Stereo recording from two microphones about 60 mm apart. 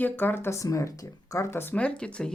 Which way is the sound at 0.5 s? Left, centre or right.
Left.